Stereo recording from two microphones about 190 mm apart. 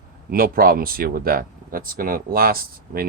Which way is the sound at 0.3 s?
50° right (ahead or behind).